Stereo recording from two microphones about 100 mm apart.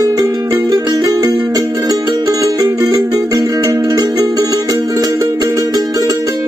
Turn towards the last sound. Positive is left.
turn(degrees=-40)  # may be behind; listen again after turning